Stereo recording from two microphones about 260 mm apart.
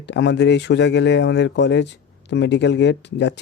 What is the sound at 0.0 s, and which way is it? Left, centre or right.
Speech, left.